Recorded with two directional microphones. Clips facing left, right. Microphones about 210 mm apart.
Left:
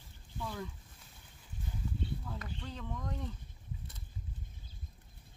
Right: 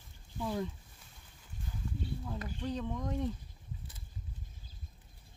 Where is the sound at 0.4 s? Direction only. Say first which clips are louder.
Right 6 dB; 20° right (ahead or behind).